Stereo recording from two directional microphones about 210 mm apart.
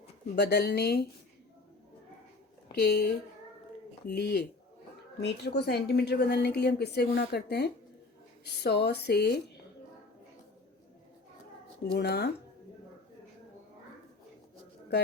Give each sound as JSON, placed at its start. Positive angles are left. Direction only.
{"t": 0.3, "sound": "a woman's voice", "side_deg": 50}
{"t": 2.7, "sound": "a woman's voice", "side_deg": 50}
{"t": 11.9, "sound": "a woman's voice", "side_deg": 50}